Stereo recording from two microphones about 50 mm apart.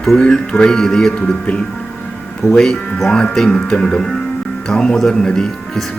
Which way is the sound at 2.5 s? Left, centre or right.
Centre.